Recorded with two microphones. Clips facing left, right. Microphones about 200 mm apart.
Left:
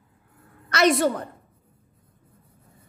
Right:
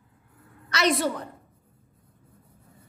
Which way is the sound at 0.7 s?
50° left (ahead or behind).